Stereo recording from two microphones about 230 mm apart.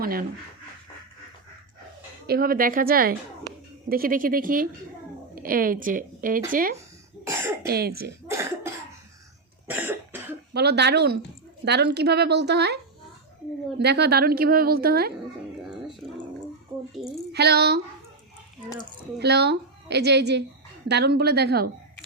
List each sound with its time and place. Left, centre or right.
0.0 s speech: right
2.2 s speech: right
7.3 s speech: centre
7.7 s a woman's voice: right
8.3 s cough: centre
10.5 s a woman's voice: right
16.7 s a sound: centre
17.3 s a woman's voice: right
19.2 s a woman's voice: right